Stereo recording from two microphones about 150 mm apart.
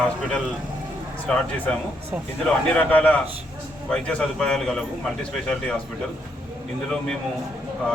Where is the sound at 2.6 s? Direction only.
10° left (ahead or behind).